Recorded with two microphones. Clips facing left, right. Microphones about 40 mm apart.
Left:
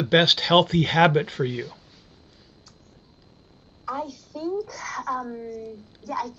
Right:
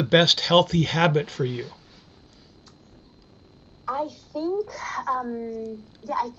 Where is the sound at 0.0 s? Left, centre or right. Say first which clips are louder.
Even; centre.